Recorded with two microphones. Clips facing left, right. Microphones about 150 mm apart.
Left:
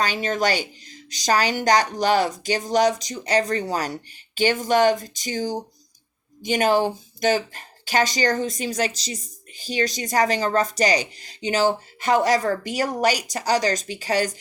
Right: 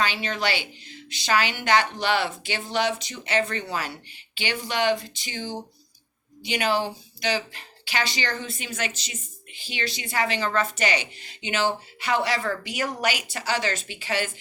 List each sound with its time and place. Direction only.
0.0 s speech: 45° left (ahead or behind)